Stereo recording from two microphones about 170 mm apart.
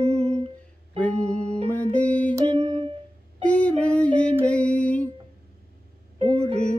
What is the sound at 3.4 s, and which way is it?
Female singing, 10° left (ahead or behind).